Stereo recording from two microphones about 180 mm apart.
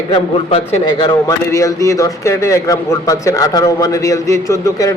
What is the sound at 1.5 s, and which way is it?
A man's voice, 15° left (ahead or behind).